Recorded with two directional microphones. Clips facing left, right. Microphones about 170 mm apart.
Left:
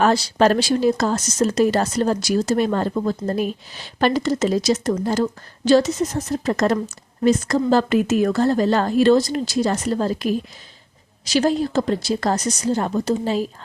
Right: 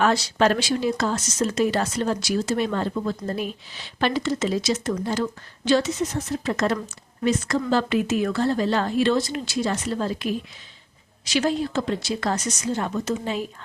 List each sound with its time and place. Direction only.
0.0 s speech: 35° left (ahead or behind)